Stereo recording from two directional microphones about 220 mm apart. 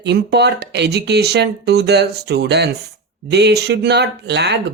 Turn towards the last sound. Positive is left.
turn(degrees=-50)  # may be behind; listen again after turning